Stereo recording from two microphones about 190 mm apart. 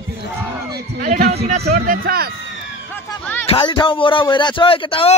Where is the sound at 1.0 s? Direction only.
40° right (ahead or behind).